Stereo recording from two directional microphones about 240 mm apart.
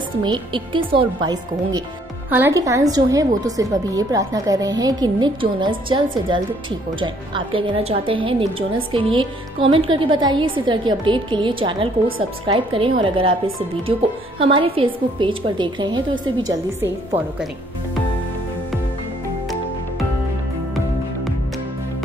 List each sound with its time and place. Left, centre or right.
0.2 s a woman's voice: centre
14.4 s a woman's voice: right